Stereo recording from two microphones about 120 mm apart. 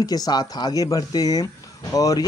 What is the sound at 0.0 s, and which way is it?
Speech, 35° left (ahead or behind).